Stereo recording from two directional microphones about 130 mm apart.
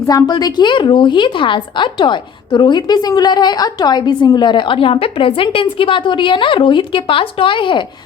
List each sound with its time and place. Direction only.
0.1 s a woman's voice: 30° left (ahead or behind)